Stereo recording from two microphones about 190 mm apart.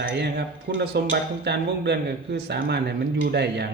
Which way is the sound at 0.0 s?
60° right (ahead or behind).